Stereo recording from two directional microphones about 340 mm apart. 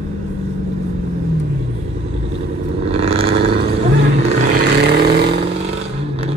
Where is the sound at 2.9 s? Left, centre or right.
Centre.